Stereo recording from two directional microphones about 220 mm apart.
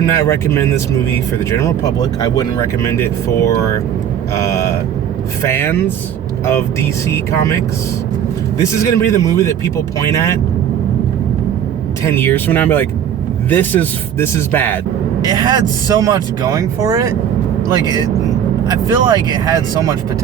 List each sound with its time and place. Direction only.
0.3 s a man's voice: 10° left (ahead or behind)
8.8 s a man's voice: 15° left (ahead or behind)
12.0 s a man's voice: 10° left (ahead or behind)
15.2 s speech: 20° right (ahead or behind)